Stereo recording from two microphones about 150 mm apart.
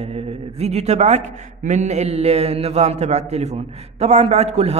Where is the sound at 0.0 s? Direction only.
45° right (ahead or behind).